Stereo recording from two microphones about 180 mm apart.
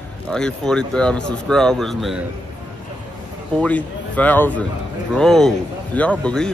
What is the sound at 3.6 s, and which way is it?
Speech, 10° left (ahead or behind).